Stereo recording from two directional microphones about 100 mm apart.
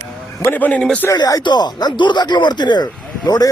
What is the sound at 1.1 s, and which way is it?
Speech, 40° left (ahead or behind).